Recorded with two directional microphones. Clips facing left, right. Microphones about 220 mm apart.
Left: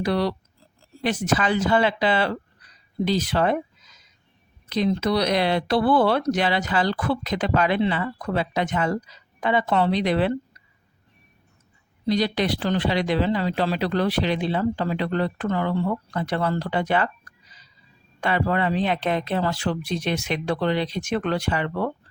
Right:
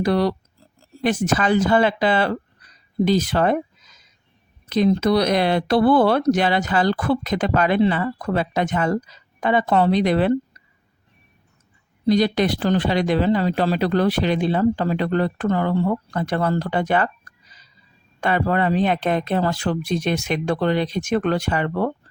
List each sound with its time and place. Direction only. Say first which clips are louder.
0.0 s speech: right 4 dB; 45° right (ahead or behind)
12.0 s speech: right 5 dB; 45° right (ahead or behind)
18.2 s speech: right 3 dB; 45° right (ahead or behind)